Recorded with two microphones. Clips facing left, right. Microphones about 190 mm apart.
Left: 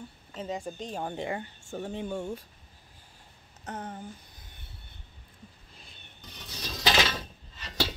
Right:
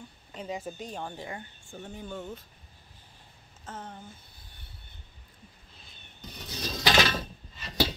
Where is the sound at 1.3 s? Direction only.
85° left.